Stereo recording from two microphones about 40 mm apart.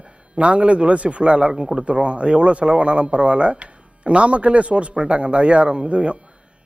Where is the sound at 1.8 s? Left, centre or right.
Right.